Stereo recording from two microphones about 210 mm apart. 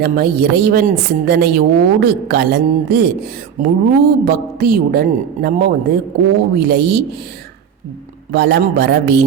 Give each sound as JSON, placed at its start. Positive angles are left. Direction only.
{"t": 0.0, "sound": "a woman's voice", "side_deg": -50}
{"t": 8.3, "sound": "a woman's voice", "side_deg": -55}